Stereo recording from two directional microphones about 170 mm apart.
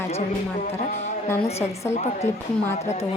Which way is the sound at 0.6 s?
40° left (ahead or behind).